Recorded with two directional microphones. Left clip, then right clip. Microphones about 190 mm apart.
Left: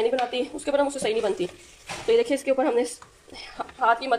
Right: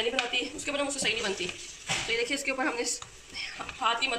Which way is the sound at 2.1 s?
50° left (ahead or behind).